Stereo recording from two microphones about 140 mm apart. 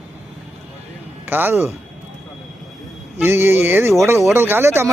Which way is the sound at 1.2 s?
15° right (ahead or behind).